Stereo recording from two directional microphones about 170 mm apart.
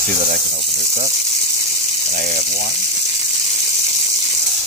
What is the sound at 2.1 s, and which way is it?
Water, 60° right (ahead or behind).